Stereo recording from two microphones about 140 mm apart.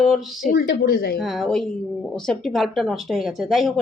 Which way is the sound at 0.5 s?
90° left.